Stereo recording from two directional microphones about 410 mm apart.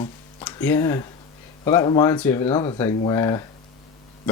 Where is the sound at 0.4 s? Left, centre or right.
Centre.